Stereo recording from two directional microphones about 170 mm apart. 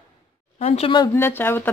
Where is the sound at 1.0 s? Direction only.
15° left (ahead or behind).